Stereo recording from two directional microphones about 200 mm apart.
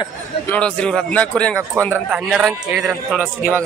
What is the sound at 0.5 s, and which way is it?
A man's voice, 5° left (ahead or behind).